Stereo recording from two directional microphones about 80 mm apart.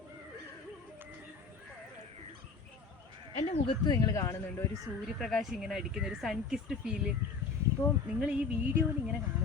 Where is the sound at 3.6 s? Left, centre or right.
Left.